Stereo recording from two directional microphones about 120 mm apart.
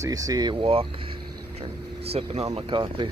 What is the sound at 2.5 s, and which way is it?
Speech, 40° right (ahead or behind).